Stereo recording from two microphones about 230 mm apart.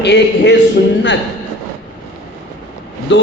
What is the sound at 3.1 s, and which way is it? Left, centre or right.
Speech, left.